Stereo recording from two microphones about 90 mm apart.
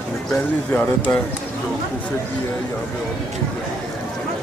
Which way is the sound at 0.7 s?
15° left (ahead or behind).